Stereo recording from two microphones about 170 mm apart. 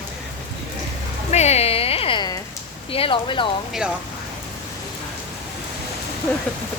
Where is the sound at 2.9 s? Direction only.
30° left (ahead or behind).